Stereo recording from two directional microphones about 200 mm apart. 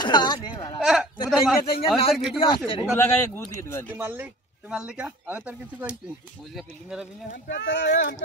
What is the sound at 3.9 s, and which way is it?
Speech, 10° right (ahead or behind).